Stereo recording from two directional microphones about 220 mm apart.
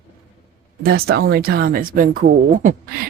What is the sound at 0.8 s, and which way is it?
Speech, 45° right (ahead or behind).